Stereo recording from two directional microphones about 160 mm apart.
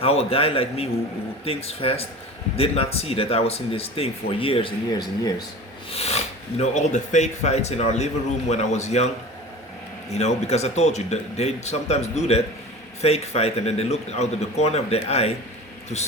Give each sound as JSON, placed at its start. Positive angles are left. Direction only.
{"t": 0.0, "sound": "speech", "side_deg": 40}
{"t": 5.9, "sound": "speech", "side_deg": 40}
{"t": 10.2, "sound": "speech", "side_deg": 45}